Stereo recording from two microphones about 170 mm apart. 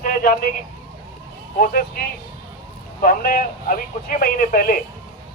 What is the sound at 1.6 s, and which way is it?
Speech, 60° left (ahead or behind).